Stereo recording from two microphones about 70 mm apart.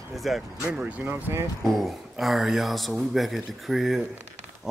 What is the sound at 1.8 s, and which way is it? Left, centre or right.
Speech, centre.